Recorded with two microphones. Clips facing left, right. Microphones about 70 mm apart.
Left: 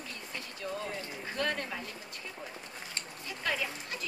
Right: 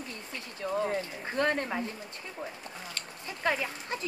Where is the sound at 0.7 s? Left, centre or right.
Right.